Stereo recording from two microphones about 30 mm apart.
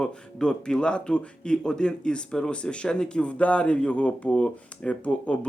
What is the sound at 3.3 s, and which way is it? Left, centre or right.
Speech, left.